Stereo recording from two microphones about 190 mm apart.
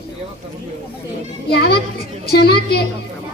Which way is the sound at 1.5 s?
55° left (ahead or behind).